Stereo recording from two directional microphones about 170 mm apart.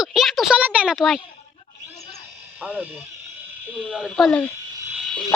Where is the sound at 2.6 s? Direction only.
10° right (ahead or behind).